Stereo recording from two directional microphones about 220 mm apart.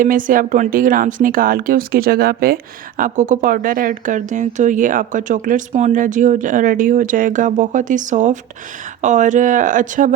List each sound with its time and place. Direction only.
0.0 s speech: 40° right (ahead or behind)